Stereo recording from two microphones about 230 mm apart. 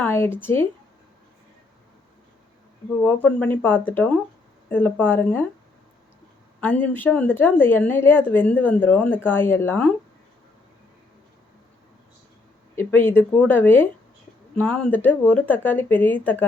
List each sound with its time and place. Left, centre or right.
0.0 s speech: centre
3.0 s speech: centre
6.6 s speech: centre
12.7 s speech: centre